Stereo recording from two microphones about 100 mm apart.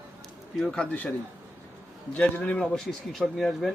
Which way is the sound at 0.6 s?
5° left (ahead or behind).